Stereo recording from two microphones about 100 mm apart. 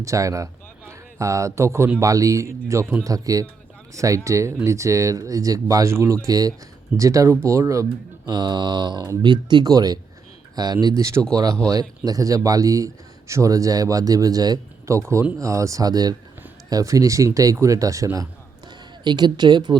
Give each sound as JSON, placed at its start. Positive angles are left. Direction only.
{"t": 0.0, "sound": "a man's voice", "side_deg": -30}
{"t": 8.3, "sound": "a man's voice", "side_deg": -45}
{"t": 19.0, "sound": "speech", "side_deg": -45}